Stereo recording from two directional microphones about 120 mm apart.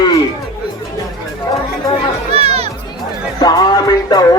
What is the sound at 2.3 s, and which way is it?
Children playing, 55° right (ahead or behind).